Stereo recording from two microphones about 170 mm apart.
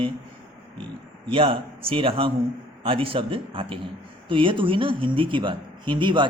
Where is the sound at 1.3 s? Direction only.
35° right (ahead or behind).